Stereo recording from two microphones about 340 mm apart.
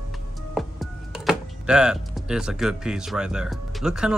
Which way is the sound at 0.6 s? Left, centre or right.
Centre.